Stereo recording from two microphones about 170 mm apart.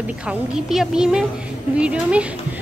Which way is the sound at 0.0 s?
5° right (ahead or behind).